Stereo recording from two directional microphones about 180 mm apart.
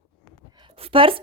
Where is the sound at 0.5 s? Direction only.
30° right (ahead or behind).